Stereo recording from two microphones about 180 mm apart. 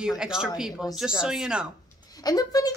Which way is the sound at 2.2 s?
20° left (ahead or behind).